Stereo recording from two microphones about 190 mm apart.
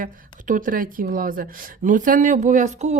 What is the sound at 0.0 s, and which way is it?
Speech, 45° right (ahead or behind).